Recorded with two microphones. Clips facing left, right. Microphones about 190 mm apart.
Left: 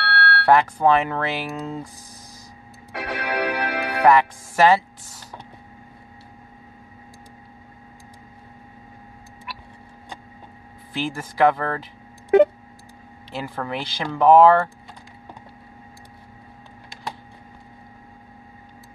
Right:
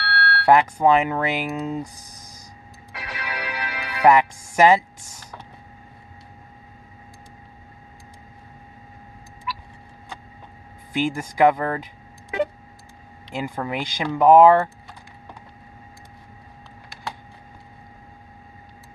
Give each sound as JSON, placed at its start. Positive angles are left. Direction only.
{"t": 0.0, "sound": "smoke detector", "side_deg": 60}
{"t": 0.5, "sound": "speech", "side_deg": -15}
{"t": 2.9, "sound": "music", "side_deg": 60}
{"t": 4.0, "sound": "speech", "side_deg": -15}
{"t": 9.5, "sound": "a sound", "side_deg": 60}
{"t": 10.9, "sound": "speech", "side_deg": -15}
{"t": 12.3, "sound": "a sound", "side_deg": 55}
{"t": 13.3, "sound": "speech", "side_deg": -15}